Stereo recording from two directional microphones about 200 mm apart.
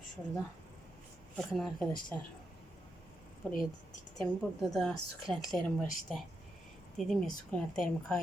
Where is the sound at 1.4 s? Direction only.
5° left (ahead or behind).